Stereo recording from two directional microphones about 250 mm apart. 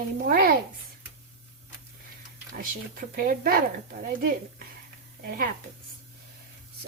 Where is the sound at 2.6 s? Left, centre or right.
Right.